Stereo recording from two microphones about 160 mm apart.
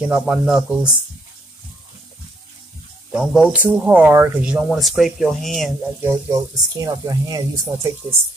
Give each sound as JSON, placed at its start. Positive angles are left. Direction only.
{"t": 0.1, "sound": "speech", "side_deg": -5}
{"t": 3.1, "sound": "speech", "side_deg": -5}
{"t": 6.0, "sound": "speech", "side_deg": -20}